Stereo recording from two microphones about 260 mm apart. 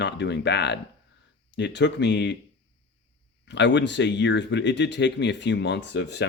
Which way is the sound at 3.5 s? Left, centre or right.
Left.